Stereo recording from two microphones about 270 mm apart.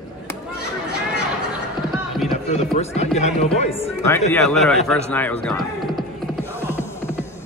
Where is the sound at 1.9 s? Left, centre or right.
Centre.